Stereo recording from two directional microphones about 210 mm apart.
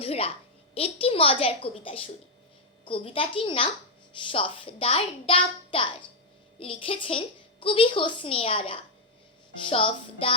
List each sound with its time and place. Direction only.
0.0 s a woman's voice: 25° left (ahead or behind)